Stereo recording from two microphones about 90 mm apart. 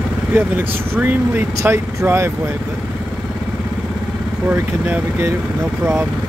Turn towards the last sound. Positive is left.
turn(degrees=-20)  # may be behind; listen again after turning